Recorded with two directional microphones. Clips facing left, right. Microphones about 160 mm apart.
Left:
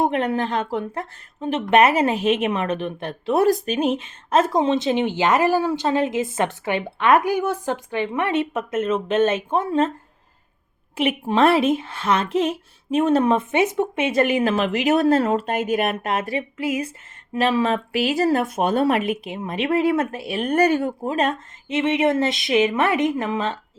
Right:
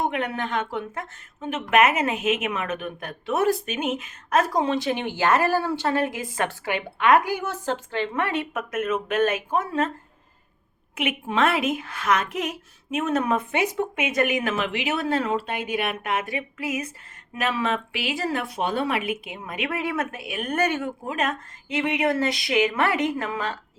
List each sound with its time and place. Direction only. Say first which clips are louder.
0.0 s speech: left 6 dB; 35° left (ahead or behind)
10.9 s speech: left 5 dB; 35° left (ahead or behind)